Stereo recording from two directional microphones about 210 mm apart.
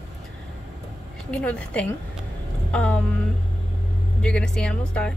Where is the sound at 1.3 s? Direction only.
5° left (ahead or behind).